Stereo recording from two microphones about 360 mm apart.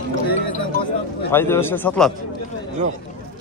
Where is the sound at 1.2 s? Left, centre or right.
Centre.